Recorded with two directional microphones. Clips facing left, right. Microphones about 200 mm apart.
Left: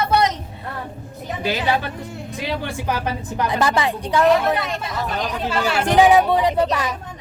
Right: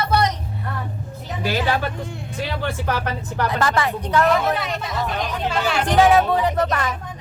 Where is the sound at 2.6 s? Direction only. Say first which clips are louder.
Even; 15° left (ahead or behind).